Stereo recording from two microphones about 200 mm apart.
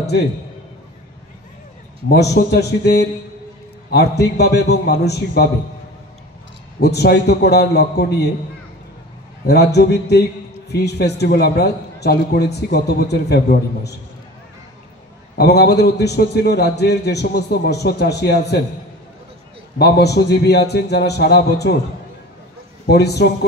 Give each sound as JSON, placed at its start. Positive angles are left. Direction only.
{"t": 2.3, "sound": "a man's voice", "side_deg": 55}
{"t": 4.2, "sound": "a man's voice", "side_deg": 55}
{"t": 6.8, "sound": "a man's voice", "side_deg": 55}
{"t": 9.5, "sound": "a man's voice", "side_deg": 55}
{"t": 15.3, "sound": "a man's voice", "side_deg": 55}
{"t": 19.8, "sound": "a man's voice", "side_deg": 55}
{"t": 22.8, "sound": "a man's voice", "side_deg": 55}